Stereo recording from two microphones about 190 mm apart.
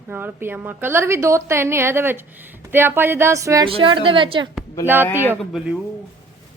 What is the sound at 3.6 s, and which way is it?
Speech, 25° right (ahead or behind).